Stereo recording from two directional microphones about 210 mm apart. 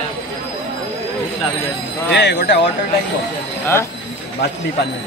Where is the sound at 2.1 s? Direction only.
55° left (ahead or behind).